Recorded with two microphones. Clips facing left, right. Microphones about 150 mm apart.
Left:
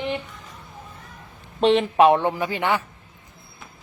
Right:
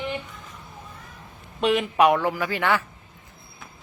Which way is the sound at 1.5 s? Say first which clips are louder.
Left 4 dB; 30° left (ahead or behind).